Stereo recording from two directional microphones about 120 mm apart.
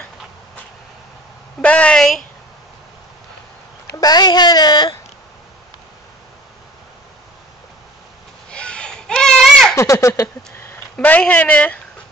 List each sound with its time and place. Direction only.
1.6 s a woman's voice: 10° left (ahead or behind)
4.0 s speech: 35° left (ahead or behind)
8.5 s a sound: 10° left (ahead or behind)
9.8 s speech: 25° left (ahead or behind)